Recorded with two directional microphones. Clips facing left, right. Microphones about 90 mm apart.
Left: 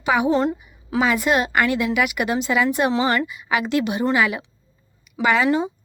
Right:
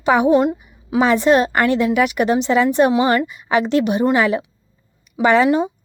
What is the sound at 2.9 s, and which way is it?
Speech, 15° right (ahead or behind).